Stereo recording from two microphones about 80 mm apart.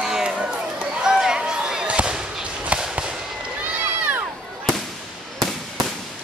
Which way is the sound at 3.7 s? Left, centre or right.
Right.